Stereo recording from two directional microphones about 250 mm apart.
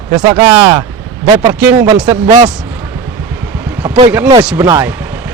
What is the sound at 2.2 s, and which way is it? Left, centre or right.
Speech, right.